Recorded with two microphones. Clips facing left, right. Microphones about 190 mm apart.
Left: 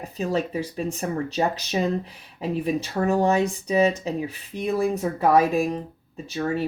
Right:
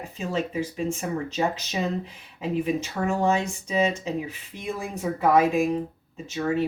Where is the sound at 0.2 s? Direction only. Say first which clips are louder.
Left 2 dB; 35° left (ahead or behind).